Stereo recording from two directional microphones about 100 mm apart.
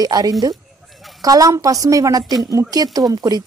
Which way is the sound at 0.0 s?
40° right (ahead or behind).